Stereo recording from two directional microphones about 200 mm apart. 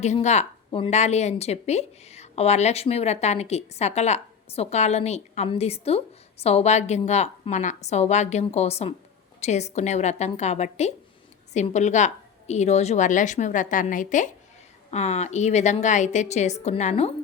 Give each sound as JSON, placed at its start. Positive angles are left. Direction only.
{"t": 0.0, "sound": "speech", "side_deg": 35}